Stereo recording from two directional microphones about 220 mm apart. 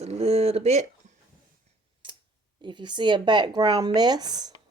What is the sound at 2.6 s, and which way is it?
A woman's voice, 20° right (ahead or behind).